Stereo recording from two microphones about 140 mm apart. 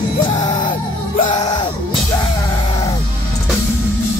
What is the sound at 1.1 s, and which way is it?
Music, 50° left (ahead or behind).